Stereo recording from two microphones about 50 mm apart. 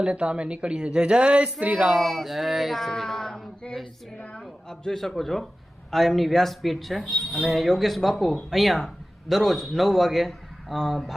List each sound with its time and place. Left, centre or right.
0.0 s a man's voice: centre
1.9 s a man's voice: centre